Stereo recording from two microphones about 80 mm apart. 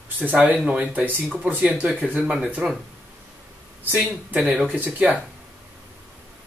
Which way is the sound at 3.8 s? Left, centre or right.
Centre.